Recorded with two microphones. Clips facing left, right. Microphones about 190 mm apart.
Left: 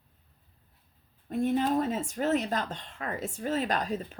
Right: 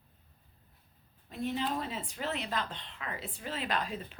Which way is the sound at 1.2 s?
50° left (ahead or behind).